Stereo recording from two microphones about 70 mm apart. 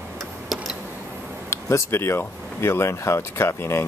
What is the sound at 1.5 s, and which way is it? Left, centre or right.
Speech, left.